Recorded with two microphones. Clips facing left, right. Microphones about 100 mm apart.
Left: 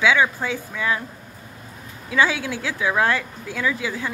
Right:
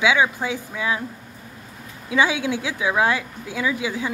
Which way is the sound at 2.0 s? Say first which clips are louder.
Right 1 dB; 15° right (ahead or behind).